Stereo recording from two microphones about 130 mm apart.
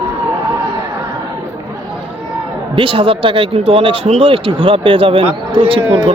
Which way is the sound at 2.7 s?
40° right (ahead or behind).